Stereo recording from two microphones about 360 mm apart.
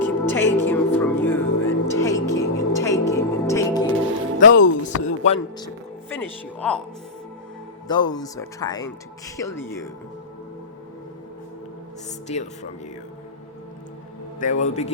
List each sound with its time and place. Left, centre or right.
0.0 s music: centre
4.4 s music: left
5.0 s a man's voice: centre
7.9 s speech: centre
12.3 s speech: centre
14.6 s a man's voice: centre